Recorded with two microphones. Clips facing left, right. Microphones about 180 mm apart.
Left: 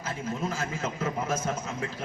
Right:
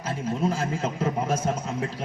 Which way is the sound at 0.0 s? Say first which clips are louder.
Right 5 dB; 30° right (ahead or behind).